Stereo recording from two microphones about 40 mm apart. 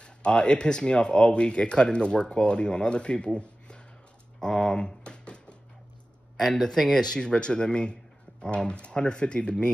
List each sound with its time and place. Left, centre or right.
0.0 s speech: left
4.4 s typewriter: centre
6.3 s speech: centre; by 9.7 s left